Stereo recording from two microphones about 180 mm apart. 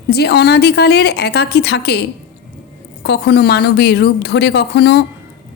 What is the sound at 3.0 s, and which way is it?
Speech, 70° left (ahead or behind).